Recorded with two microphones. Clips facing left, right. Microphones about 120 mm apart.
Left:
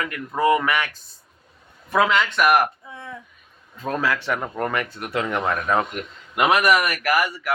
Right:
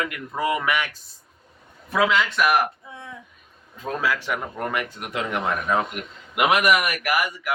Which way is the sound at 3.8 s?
10° right (ahead or behind).